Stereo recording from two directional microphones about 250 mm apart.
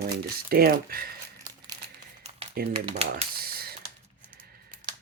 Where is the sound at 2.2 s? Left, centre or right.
Right.